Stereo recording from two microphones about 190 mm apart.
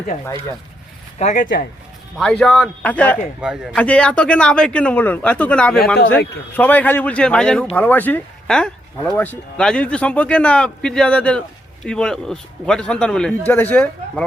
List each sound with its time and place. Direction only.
1.2 s speech: 40° left (ahead or behind)
2.1 s speech: 5° left (ahead or behind)
3.4 s speech: 5° right (ahead or behind)